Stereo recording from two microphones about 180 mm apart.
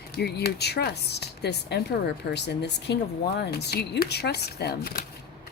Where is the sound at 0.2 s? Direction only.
65° left (ahead or behind).